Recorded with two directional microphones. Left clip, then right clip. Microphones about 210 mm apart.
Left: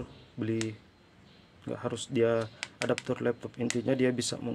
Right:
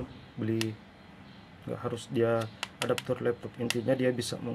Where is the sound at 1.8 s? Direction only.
55° left (ahead or behind).